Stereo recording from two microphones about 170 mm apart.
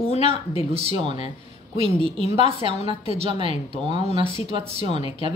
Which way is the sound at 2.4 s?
35° right (ahead or behind).